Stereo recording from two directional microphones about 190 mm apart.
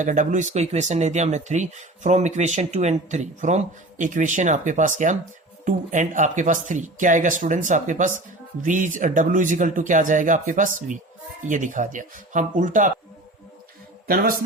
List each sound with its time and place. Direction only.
0.0 s speech: 40° right (ahead or behind)
14.1 s speech: 50° right (ahead or behind)